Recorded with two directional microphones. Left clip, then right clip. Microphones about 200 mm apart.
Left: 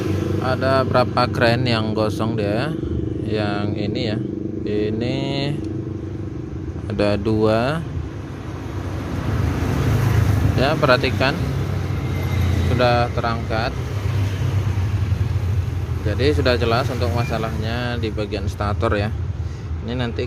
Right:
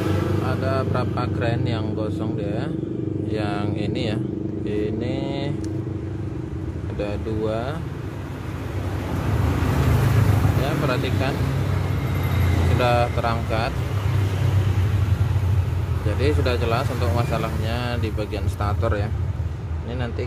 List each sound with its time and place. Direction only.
0.4 s speech: 30° left (ahead or behind)
3.3 s speech: 20° left (ahead or behind)
7.0 s speech: 35° left (ahead or behind)
10.6 s speech: 30° left (ahead or behind)
12.7 s speech: 15° left (ahead or behind)
16.1 s speech: 20° left (ahead or behind)